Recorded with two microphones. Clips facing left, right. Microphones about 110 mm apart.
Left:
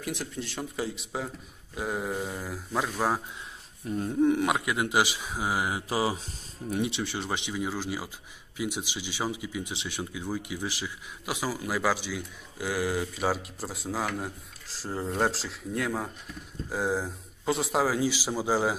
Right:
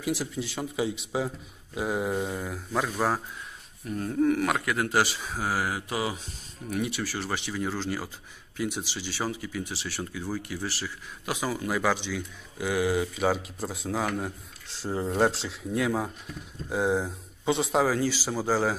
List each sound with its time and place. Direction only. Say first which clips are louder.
0.0 s speech: right 4 dB; 5° right (ahead or behind)
3.8 s a man's voice: left 1 dB; 25° left (ahead or behind)